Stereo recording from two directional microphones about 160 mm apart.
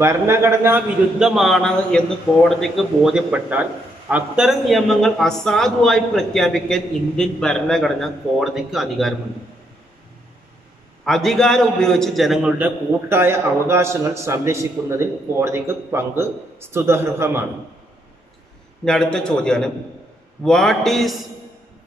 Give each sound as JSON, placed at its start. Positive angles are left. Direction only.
{"t": 0.0, "sound": "a man's voice", "side_deg": -15}
{"t": 1.2, "sound": "speech", "side_deg": 0}
{"t": 11.1, "sound": "a man's voice", "side_deg": 5}
{"t": 18.9, "sound": "speech", "side_deg": 5}